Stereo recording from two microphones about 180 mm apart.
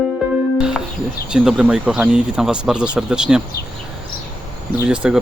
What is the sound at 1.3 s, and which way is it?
Speech, 5° right (ahead or behind).